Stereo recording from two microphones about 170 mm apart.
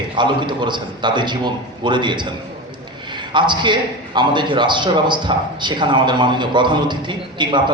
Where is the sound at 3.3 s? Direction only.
25° right (ahead or behind).